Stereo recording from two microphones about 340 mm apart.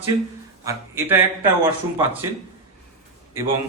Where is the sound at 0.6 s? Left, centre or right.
Centre.